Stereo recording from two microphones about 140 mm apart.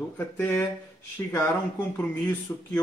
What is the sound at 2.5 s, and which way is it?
Speech, 15° left (ahead or behind).